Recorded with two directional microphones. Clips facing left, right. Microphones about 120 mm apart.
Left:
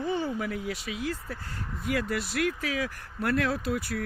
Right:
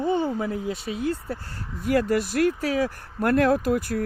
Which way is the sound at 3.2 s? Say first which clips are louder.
Right 7 dB; 50° right (ahead or behind).